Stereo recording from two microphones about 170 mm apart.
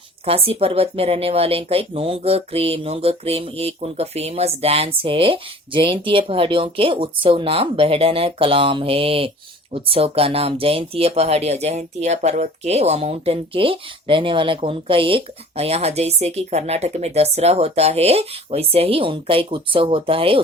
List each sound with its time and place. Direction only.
0.3 s speech: 35° right (ahead or behind)